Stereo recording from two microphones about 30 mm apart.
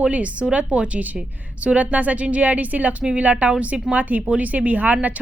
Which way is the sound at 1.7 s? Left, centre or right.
Right.